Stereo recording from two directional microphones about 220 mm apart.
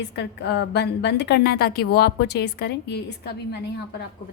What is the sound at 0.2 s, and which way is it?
A woman's voice, 50° left (ahead or behind).